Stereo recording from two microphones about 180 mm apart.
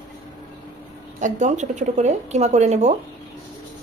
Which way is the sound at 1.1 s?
45° right (ahead or behind).